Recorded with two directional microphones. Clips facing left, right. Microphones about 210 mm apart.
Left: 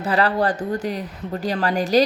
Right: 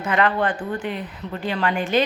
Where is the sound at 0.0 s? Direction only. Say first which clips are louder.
Left 1 dB; 35° left (ahead or behind).